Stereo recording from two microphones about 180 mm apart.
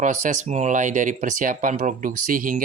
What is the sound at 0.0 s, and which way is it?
Speech, 45° right (ahead or behind).